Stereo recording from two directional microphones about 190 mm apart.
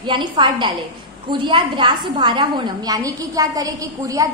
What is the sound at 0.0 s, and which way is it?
A woman's voice, 25° right (ahead or behind).